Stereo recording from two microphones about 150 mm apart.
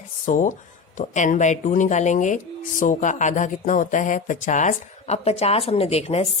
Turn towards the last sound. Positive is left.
turn(degrees=45)  # may be behind; listen again after turning